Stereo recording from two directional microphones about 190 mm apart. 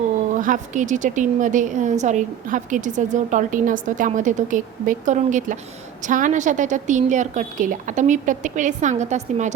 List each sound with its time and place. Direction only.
0.3 s a woman's voice: 40° right (ahead or behind)